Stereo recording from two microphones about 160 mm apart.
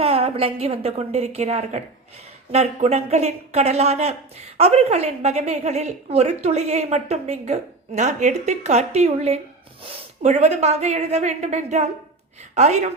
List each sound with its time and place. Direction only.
0.0 s a woman's voice: 40° right (ahead or behind)